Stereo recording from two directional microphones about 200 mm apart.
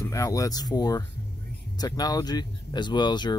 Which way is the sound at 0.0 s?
15° left (ahead or behind).